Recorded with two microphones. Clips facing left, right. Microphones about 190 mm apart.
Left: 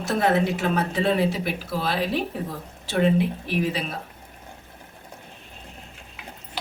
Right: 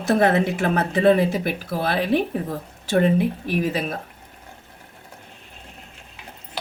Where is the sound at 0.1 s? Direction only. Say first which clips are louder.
Right 3 dB; 55° right (ahead or behind).